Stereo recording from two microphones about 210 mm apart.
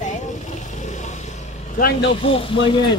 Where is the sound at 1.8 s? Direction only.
50° left (ahead or behind).